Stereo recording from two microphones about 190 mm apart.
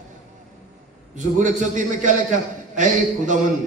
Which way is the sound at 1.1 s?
40° right (ahead or behind).